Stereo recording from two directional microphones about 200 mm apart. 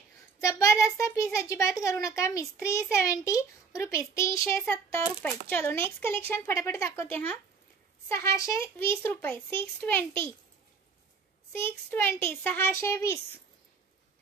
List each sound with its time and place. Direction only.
0.4 s a child's voice: 15° left (ahead or behind)
8.1 s a child's voice: 15° left (ahead or behind)
11.5 s a child's voice: 10° left (ahead or behind)